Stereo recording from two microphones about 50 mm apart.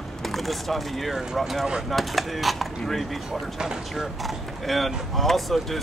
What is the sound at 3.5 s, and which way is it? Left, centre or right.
Speech, centre.